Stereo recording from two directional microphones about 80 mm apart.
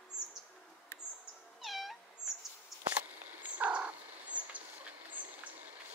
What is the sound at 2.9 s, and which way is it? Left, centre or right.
Turkey, centre.